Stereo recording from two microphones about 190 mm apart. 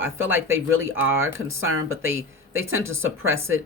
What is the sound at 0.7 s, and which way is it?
Speech, 90° right.